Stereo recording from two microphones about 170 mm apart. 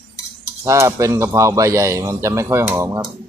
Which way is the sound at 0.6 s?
15° right (ahead or behind).